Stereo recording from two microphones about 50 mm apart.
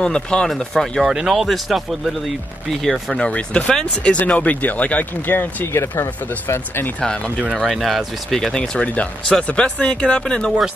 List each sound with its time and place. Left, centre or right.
0.0 s speech: centre
1.0 s speech: centre
3.2 s speech: left
5.2 s speech: left
5.7 s speech: left
6.4 s speech: left
7.6 s speech: centre